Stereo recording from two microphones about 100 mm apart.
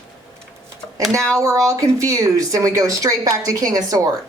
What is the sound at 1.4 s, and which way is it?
A woman's voice, 30° right (ahead or behind).